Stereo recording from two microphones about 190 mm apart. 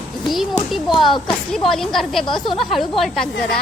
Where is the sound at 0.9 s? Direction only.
Centre (ahead or behind).